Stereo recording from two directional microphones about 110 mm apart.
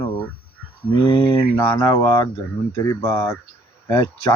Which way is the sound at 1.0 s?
50° left (ahead or behind).